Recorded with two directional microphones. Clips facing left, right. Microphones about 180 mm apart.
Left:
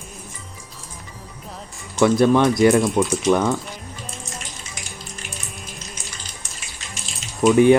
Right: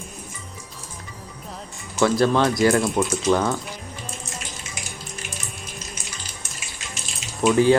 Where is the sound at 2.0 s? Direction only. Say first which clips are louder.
Left 3 dB; 20° left (ahead or behind).